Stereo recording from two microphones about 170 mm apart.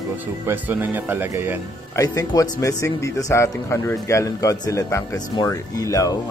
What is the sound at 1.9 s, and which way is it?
Speech, 20° left (ahead or behind).